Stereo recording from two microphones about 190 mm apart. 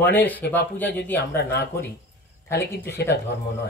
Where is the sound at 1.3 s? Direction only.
60° left (ahead or behind).